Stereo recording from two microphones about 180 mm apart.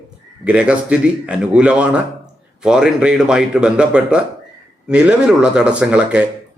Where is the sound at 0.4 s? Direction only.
5° right (ahead or behind).